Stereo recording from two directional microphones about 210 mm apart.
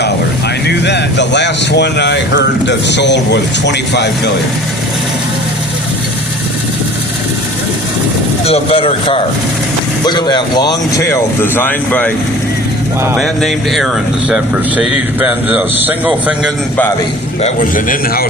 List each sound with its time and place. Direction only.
0.7 s speech: 55° left (ahead or behind)
8.4 s speech: 25° left (ahead or behind); by 12.1 s 5° left (ahead or behind)
13.1 s speech: centre (ahead or behind)
17.4 s a man's voice: 40° left (ahead or behind)